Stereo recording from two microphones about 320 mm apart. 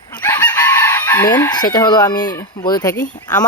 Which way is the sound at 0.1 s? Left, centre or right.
Centre.